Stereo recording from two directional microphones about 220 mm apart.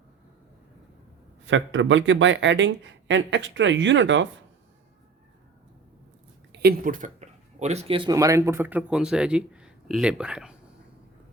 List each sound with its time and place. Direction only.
1.5 s speech: 60° right (ahead or behind)
6.5 s speech: 45° right (ahead or behind); by 10.5 s 5° right (ahead or behind)